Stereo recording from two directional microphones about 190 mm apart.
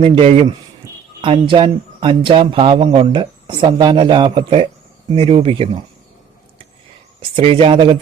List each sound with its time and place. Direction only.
0.0 s speech: 30° right (ahead or behind)
7.3 s speech: 30° right (ahead or behind)